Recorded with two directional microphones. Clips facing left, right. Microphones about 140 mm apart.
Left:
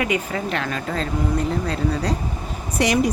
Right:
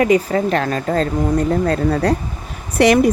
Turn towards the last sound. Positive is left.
turn(degrees=-60)  # may be behind; listen again after turning